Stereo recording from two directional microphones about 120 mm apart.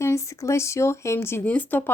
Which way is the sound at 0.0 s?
25° left (ahead or behind).